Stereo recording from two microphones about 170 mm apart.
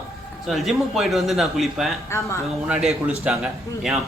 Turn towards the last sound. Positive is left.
turn(degrees=-5)  # may be behind; listen again after turning